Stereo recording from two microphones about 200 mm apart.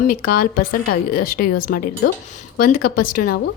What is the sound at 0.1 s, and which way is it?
Speech, 45° left (ahead or behind).